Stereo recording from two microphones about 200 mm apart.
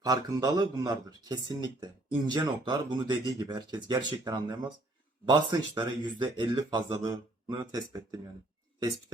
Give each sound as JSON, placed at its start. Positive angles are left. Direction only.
{"t": 0.0, "sound": "speech", "side_deg": -20}